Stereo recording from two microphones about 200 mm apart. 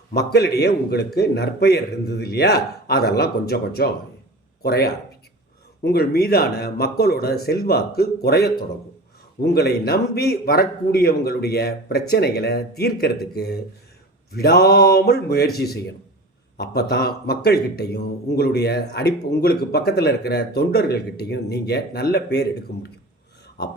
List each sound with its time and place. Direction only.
0.1 s a man's voice: 50° left (ahead or behind)
16.9 s a man's voice: 50° left (ahead or behind)